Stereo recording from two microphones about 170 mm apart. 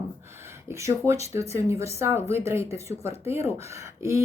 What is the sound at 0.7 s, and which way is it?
A woman's voice, 15° right (ahead or behind).